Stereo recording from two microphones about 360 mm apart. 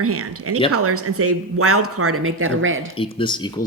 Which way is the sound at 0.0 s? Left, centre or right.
Right.